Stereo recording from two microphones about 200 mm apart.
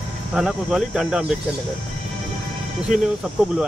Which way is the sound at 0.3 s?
5° right (ahead or behind).